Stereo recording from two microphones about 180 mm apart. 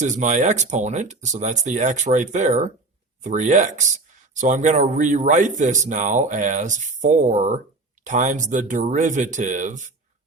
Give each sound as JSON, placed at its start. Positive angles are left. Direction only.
{"t": 0.0, "sound": "speech", "side_deg": -40}